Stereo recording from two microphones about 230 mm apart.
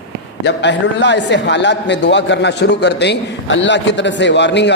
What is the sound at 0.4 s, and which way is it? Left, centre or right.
A man's voice, left.